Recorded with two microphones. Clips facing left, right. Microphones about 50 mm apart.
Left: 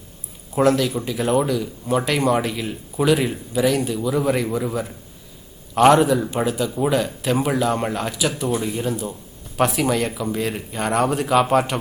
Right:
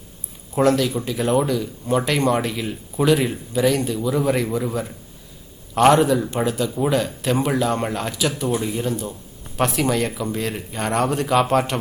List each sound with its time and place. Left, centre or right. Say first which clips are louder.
0.5 s speech: even; centre